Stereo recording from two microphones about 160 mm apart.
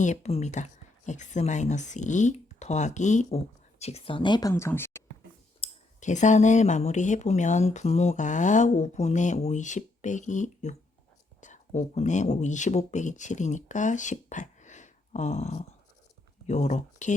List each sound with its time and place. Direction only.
0.0 s speech: 45° left (ahead or behind); by 5.0 s 15° left (ahead or behind)
5.5 s speech: 45° left (ahead or behind)